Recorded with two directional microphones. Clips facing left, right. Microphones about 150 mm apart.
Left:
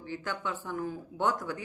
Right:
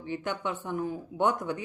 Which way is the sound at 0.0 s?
20° right (ahead or behind).